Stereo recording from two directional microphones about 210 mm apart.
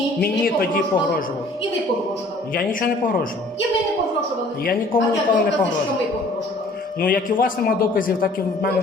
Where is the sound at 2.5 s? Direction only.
40° left (ahead or behind).